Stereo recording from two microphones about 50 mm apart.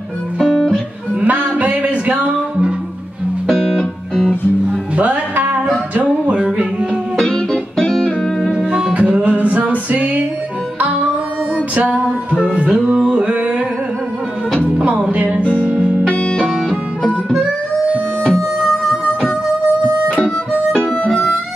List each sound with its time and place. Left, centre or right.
0.4 s music: centre
1.2 s music: right
4.3 s music: centre
5.0 s music: right
7.2 s music: centre
8.9 s music: right
11.5 s music: right
15.0 s music: right
15.6 s music: centre
16.1 s music: left
17.4 s harmonica: right